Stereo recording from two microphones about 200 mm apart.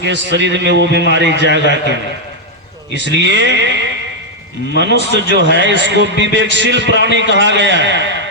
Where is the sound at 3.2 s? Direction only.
60° right (ahead or behind).